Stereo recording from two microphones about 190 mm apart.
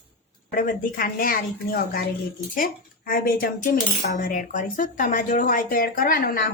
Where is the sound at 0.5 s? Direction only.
45° left (ahead or behind).